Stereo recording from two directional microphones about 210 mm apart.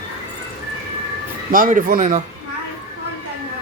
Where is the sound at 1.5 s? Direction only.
40° right (ahead or behind).